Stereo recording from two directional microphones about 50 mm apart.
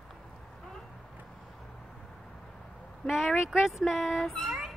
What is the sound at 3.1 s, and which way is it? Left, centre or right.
Speech, centre.